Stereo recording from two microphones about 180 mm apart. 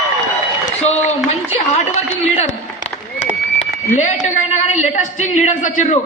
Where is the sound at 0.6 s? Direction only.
40° left (ahead or behind).